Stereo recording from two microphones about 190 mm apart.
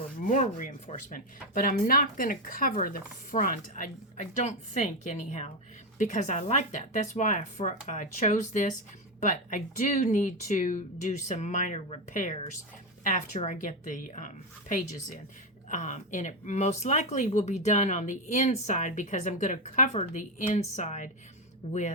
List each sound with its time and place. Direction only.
0.2 s speech: 40° left (ahead or behind)